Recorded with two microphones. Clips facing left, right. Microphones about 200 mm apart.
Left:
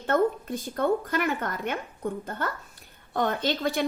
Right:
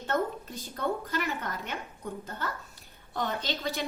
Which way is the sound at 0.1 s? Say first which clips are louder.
Left 7 dB; 55° left (ahead or behind).